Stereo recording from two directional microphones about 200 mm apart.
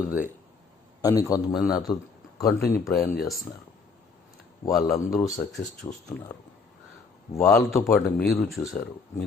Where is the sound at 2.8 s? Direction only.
15° left (ahead or behind).